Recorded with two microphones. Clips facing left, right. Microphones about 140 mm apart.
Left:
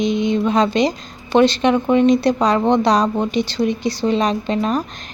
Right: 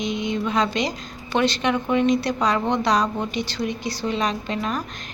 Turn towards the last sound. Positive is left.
turn(degrees=30)  # may be behind; listen again after turning